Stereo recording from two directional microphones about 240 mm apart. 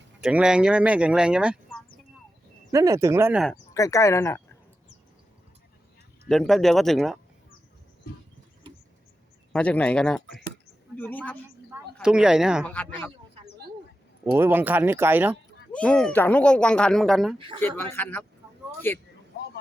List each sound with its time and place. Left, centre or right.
0.2 s speech: centre
3.8 s a man's voice: centre
6.2 s speech: centre
8.1 s a sound: left
9.5 s a man's voice: centre
14.3 s speech: centre
15.7 s speech: centre
17.3 s speech: right
17.6 s a man's voice: centre